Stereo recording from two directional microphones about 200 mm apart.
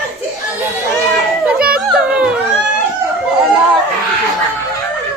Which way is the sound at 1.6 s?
5° right (ahead or behind).